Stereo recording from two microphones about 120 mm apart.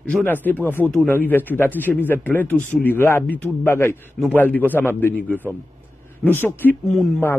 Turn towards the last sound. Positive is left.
turn(degrees=0)  # may be behind; listen again after turning